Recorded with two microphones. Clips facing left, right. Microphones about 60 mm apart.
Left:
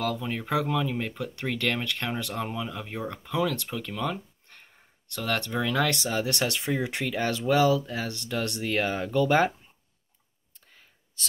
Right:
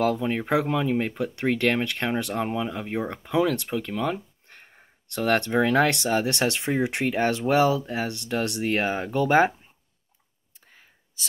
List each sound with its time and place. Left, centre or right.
0.0 s speech: right
5.1 s speech: right
10.5 s clicking: centre